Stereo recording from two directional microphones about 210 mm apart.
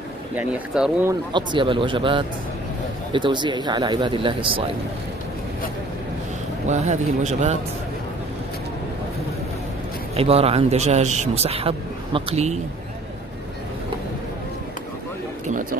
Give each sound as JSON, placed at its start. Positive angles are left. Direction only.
{"t": 0.4, "sound": "speech", "side_deg": -5}
{"t": 1.3, "sound": "speech", "side_deg": -20}
{"t": 6.7, "sound": "speech", "side_deg": -35}
{"t": 10.1, "sound": "speech", "side_deg": -30}